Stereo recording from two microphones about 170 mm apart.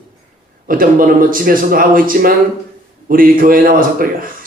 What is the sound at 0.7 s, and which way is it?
Speech, 55° right (ahead or behind).